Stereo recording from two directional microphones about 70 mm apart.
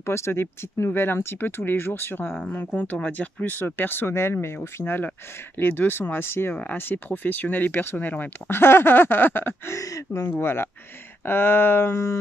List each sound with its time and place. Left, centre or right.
0.0 s speech: left
9.8 s speech: left
10.3 s speech: left